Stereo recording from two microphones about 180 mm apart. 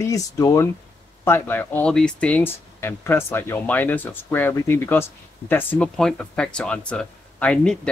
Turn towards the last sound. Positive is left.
turn(degrees=5)  # may be behind; listen again after turning